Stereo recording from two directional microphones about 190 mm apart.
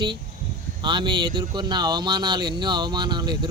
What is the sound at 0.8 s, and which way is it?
Speech, 25° right (ahead or behind).